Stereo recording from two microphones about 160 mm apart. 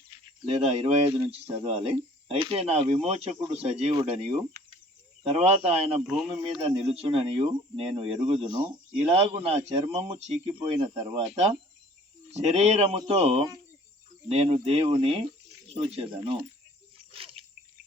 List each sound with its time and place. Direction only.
0.4 s speech: 35° right (ahead or behind)
6.1 s speech: 5° right (ahead or behind)
6.6 s speech: 35° right (ahead or behind)
11.2 s speech: 45° right (ahead or behind)
17.1 s a sound: 35° right (ahead or behind)